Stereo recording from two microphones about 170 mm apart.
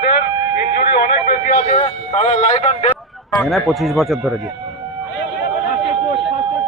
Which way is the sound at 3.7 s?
Centre (ahead or behind).